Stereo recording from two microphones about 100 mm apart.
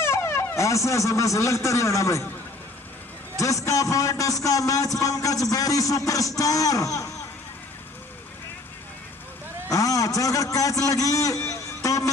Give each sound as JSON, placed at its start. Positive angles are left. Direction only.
{"t": 0.0, "sound": "speech", "side_deg": 25}
{"t": 3.3, "sound": "a man's voice", "side_deg": 30}
{"t": 9.7, "sound": "a man's voice", "side_deg": 35}
{"t": 11.4, "sound": "a sound", "side_deg": 35}